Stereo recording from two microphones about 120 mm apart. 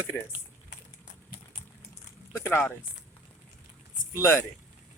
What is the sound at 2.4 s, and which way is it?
Speech, 15° left (ahead or behind).